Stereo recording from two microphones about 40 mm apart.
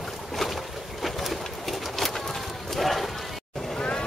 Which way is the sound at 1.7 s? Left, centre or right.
Centre.